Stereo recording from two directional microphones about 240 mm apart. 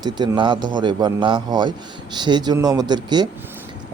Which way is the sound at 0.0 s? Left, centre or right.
Centre.